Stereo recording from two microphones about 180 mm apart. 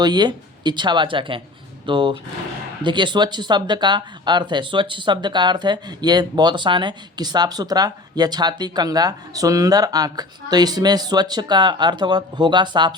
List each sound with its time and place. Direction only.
0.0 s speech: 25° right (ahead or behind)